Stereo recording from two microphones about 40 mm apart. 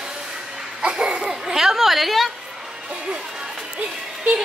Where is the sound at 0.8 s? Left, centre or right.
Right.